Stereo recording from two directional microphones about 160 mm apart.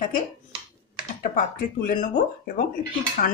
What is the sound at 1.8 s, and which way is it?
Speech, 55° left (ahead or behind).